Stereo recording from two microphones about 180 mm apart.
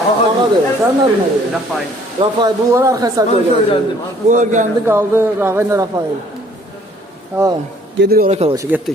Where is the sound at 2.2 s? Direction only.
25° right (ahead or behind).